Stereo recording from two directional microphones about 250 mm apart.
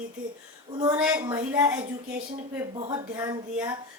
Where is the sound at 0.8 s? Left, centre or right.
Centre.